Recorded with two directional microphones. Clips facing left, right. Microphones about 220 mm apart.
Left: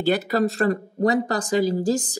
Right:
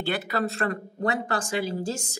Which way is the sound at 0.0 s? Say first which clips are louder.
Left 7 dB; 40° left (ahead or behind).